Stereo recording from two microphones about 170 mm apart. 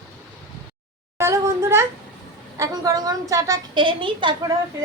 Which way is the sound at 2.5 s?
20° right (ahead or behind).